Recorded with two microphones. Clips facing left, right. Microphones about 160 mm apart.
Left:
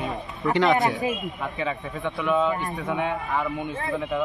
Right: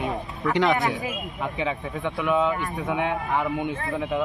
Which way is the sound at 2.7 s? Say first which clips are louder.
Right 1 dB; centre (ahead or behind).